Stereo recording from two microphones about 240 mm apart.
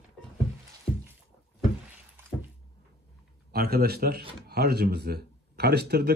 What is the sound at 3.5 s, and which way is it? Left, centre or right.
Speech, right.